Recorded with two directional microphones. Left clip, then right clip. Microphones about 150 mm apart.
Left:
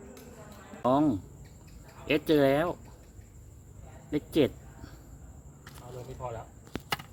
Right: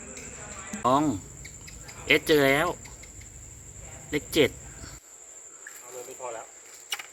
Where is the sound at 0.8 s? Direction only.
70° left (ahead or behind).